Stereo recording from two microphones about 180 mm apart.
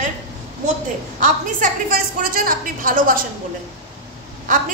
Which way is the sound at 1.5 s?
50° right (ahead or behind).